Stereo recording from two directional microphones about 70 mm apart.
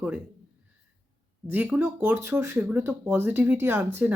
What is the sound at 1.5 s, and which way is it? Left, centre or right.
A woman's voice, right.